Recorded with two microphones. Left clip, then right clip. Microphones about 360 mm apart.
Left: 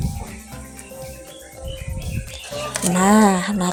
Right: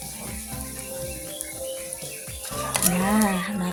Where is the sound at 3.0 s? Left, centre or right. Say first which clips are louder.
Left 11 dB; right.